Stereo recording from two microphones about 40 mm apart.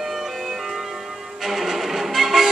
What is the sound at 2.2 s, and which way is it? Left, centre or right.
Music, centre.